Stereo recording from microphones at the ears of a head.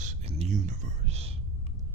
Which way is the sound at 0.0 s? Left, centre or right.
Right.